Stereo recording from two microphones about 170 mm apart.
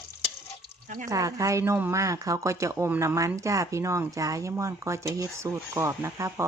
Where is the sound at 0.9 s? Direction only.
45° right (ahead or behind).